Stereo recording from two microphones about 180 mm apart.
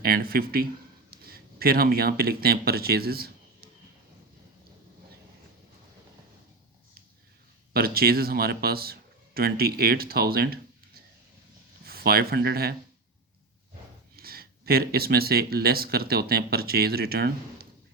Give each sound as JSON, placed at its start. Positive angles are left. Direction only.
{"t": 0.0, "sound": "speech", "side_deg": -55}
{"t": 7.7, "sound": "speech", "side_deg": -55}
{"t": 11.9, "sound": "speech", "side_deg": -55}
{"t": 14.2, "sound": "speech", "side_deg": -55}